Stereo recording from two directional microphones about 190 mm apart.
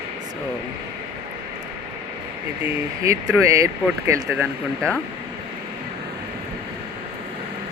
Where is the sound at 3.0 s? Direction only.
15° right (ahead or behind).